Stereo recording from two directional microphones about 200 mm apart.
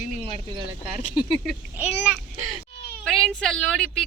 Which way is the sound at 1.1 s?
Centre (ahead or behind).